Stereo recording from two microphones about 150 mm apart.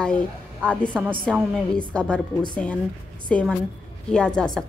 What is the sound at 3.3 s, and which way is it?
A woman's voice, 10° left (ahead or behind).